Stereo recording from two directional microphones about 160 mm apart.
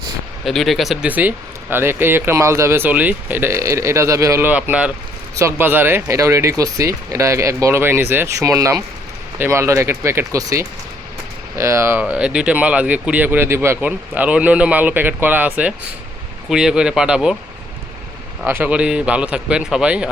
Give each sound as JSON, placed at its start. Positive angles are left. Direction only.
{"t": 0.4, "sound": "speech", "side_deg": 0}
{"t": 18.4, "sound": "speech", "side_deg": -10}